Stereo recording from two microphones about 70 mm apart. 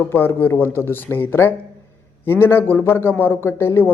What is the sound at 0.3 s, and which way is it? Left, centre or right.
A man's voice, left.